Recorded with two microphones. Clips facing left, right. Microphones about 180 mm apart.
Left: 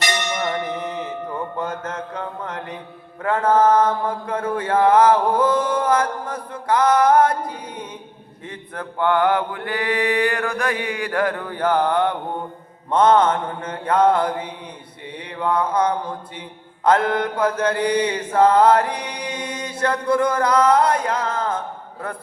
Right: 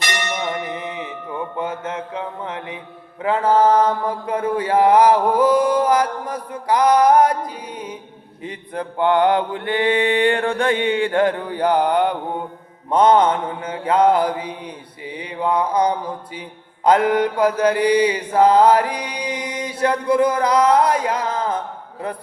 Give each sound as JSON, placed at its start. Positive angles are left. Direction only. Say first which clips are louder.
{"t": 1.5, "sound": "a sound", "louder": "right 1 dB", "side_deg": -10}
{"t": 3.3, "sound": "mantra", "louder": "right 1 dB", "side_deg": -10}
{"t": 8.4, "sound": "mantra", "louder": "right 4 dB", "side_deg": -20}